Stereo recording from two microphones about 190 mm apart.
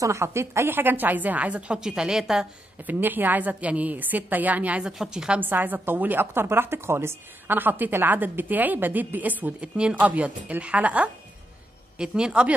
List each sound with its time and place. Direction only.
0.0 s a woman's voice: 15° right (ahead or behind)